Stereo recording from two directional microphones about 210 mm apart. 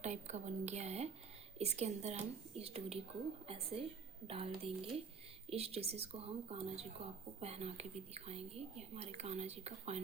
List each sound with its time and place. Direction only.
0.0 s speech: 35° right (ahead or behind)